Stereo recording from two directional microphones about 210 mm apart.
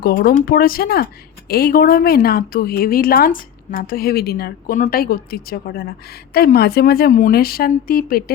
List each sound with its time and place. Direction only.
0.0 s speech: 45° left (ahead or behind)